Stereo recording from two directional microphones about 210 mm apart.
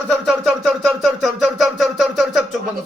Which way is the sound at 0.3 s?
Centre (ahead or behind).